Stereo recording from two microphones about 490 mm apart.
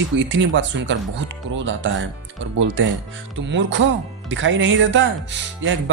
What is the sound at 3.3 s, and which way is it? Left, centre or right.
Speech, right.